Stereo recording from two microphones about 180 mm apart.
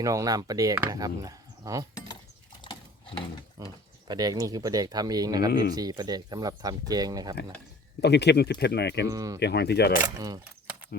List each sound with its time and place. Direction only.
0.0 s speech: 20° right (ahead or behind)
3.6 s speech: 20° right (ahead or behind)
8.0 s speech: 70° left (ahead or behind)
9.0 s speech: 20° right (ahead or behind)
9.4 s speech: 65° left (ahead or behind)
10.0 s speech: 20° right (ahead or behind)